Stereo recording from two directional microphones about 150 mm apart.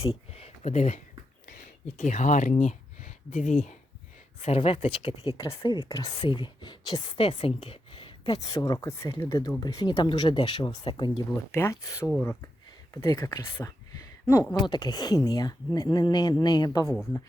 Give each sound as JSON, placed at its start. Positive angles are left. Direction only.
{"t": 0.0, "sound": "speech", "side_deg": 40}
{"t": 2.0, "sound": "a woman's voice", "side_deg": 55}